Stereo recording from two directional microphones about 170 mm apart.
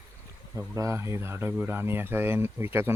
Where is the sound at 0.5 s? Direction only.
20° right (ahead or behind).